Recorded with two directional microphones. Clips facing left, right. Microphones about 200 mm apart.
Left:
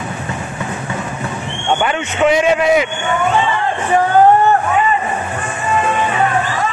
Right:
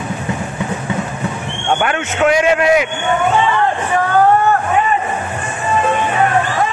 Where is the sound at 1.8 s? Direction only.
Centre (ahead or behind).